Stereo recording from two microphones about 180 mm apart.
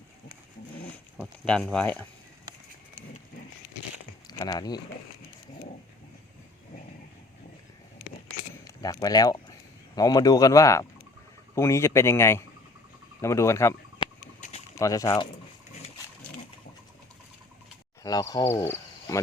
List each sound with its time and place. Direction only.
0.9 s a sound: 5° left (ahead or behind)
4.3 s speech: 20° left (ahead or behind)
8.6 s speech: 20° left (ahead or behind)
18.0 s speech: 20° left (ahead or behind)
18.5 s cricket: 15° left (ahead or behind)